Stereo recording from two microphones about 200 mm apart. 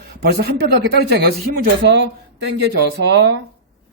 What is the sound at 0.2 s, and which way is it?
Speech, 55° right (ahead or behind).